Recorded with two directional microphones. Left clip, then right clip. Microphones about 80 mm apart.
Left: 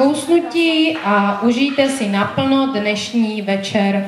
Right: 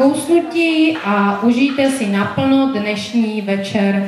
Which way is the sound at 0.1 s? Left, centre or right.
Left.